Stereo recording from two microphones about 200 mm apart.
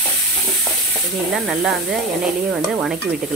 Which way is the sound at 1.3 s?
Centre (ahead or behind).